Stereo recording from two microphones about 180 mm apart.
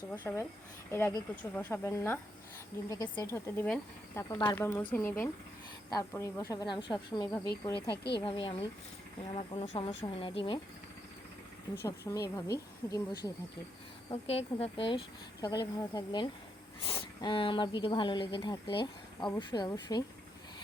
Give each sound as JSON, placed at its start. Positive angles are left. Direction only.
{"t": 0.1, "sound": "speech", "side_deg": 15}
{"t": 11.8, "sound": "speech", "side_deg": 20}
{"t": 14.1, "sound": "speech", "side_deg": 35}